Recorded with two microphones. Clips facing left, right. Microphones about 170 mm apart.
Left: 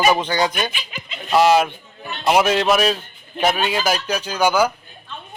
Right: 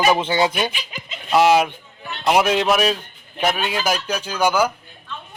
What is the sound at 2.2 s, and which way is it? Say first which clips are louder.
Speech: left 1 dB; centre (ahead or behind).